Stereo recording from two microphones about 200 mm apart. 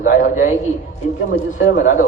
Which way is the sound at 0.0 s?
40° left (ahead or behind).